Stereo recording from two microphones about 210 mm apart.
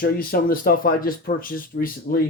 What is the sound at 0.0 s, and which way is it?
Speech, 45° left (ahead or behind).